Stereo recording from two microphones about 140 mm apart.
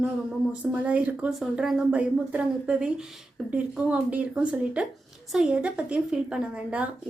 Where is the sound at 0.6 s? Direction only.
10° right (ahead or behind).